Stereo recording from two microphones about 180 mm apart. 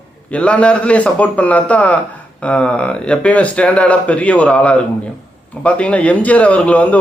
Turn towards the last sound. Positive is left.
turn(degrees=5)  # may be behind; listen again after turning